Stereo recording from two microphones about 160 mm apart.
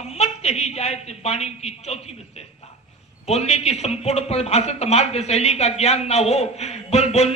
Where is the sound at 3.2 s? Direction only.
40° left (ahead or behind).